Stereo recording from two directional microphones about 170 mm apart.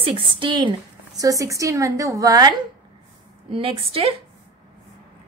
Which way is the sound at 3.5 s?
30° right (ahead or behind).